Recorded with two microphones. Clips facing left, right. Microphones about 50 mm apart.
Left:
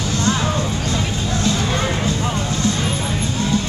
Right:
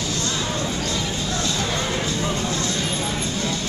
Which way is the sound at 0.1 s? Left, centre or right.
Left.